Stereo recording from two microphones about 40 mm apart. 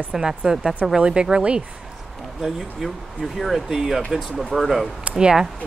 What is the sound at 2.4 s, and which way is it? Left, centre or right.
Speech, centre.